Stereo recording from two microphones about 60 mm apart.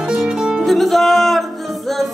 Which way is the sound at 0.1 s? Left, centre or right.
Centre.